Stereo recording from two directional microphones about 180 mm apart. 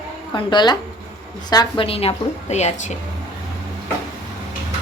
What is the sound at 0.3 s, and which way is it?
A woman's voice, 25° left (ahead or behind).